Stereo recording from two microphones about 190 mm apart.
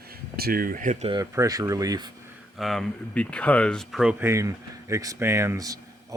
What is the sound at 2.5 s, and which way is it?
Speech, centre (ahead or behind).